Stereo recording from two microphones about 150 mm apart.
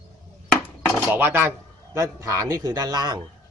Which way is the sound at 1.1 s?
15° right (ahead or behind).